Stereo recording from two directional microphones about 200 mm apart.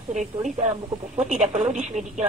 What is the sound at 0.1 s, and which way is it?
Speech, 35° right (ahead or behind).